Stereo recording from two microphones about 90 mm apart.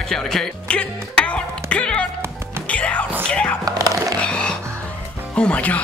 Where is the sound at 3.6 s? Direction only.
40° right (ahead or behind).